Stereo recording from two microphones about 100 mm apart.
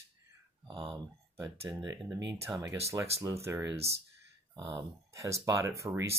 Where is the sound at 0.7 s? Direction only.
60° right (ahead or behind).